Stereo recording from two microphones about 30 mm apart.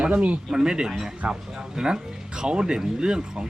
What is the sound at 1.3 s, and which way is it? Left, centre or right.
Speech, right.